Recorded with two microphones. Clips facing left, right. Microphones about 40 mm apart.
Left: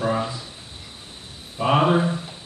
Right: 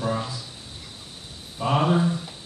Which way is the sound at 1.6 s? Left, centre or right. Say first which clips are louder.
Left 3 dB; left.